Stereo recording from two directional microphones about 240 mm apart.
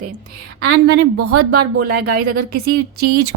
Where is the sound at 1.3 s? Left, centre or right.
Right.